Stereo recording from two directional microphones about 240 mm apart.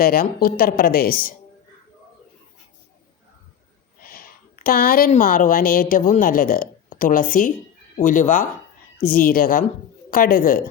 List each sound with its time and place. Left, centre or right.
0.0 s speech: left
4.0 s a woman's voice: left